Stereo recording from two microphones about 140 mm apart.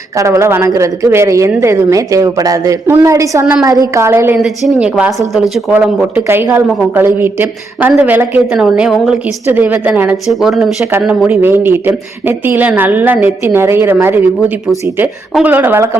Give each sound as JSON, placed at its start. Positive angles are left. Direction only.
{"t": 0.2, "sound": "speech", "side_deg": -20}
{"t": 4.4, "sound": "a woman's voice", "side_deg": 0}
{"t": 11.3, "sound": "a woman's voice", "side_deg": -15}